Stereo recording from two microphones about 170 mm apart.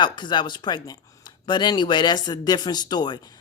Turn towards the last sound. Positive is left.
turn(degrees=25)  # may be behind; listen again after turning